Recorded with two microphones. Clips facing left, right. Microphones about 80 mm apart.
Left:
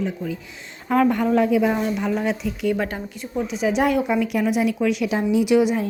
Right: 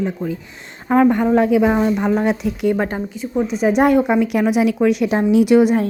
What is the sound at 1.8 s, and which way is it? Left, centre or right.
A woman's voice, right.